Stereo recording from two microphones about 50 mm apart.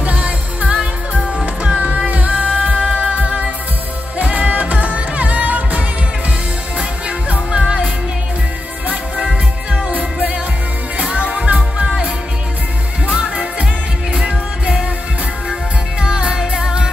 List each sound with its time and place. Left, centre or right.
0.0 s music: right
4.2 s music: right
7.1 s music: right
11.0 s music: right
13.1 s music: centre
16.0 s music: centre